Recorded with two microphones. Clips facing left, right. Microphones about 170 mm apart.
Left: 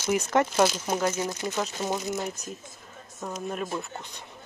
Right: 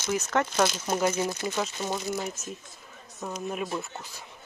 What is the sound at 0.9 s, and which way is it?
Speech, 10° right (ahead or behind).